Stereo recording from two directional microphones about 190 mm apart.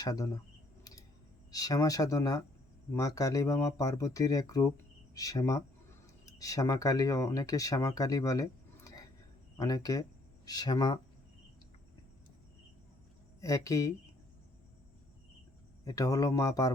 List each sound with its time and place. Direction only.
0.0 s speech: 20° left (ahead or behind)
1.5 s speech: 20° left (ahead or behind)
13.4 s speech: 15° left (ahead or behind)
15.8 s speech: 15° left (ahead or behind)